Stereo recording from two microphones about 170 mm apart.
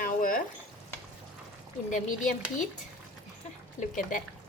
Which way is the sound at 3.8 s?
50° left (ahead or behind).